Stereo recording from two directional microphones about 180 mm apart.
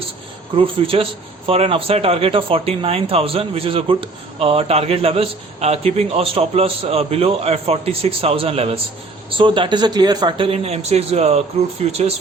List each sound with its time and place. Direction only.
0.5 s speech: 30° right (ahead or behind)